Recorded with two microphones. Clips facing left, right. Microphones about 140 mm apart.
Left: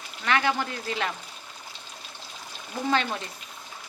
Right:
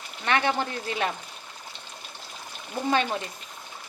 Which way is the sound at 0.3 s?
25° right (ahead or behind).